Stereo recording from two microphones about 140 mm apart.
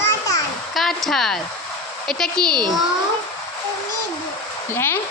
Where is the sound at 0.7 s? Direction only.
Centre (ahead or behind).